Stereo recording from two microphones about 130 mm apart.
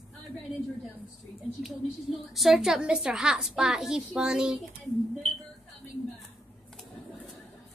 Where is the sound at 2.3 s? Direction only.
Centre (ahead or behind).